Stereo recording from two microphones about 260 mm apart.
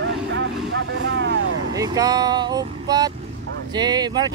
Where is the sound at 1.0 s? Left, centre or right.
Right.